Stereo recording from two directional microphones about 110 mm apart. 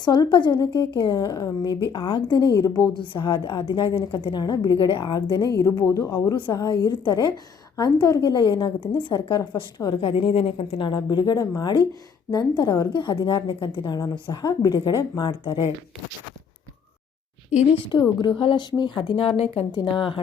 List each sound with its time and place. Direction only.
0.0 s speech: 40° left (ahead or behind)
5.9 s a woman's voice: 30° left (ahead or behind)
10.0 s a woman's voice: 55° left (ahead or behind)
17.7 s speech: 45° left (ahead or behind)